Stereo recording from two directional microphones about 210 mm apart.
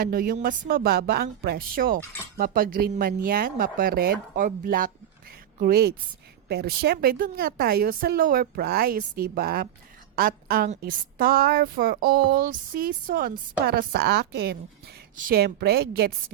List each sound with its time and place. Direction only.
0.0 s a woman's voice: 45° right (ahead or behind)